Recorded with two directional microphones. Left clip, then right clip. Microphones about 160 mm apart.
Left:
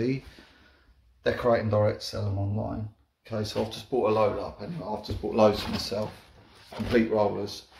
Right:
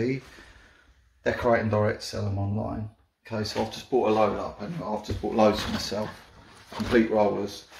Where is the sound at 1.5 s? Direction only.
Centre (ahead or behind).